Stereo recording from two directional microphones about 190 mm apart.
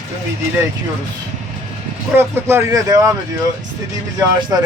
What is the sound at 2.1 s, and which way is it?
Speech, 10° right (ahead or behind).